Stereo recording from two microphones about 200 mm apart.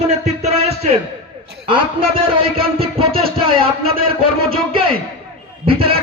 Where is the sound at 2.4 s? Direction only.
30° right (ahead or behind).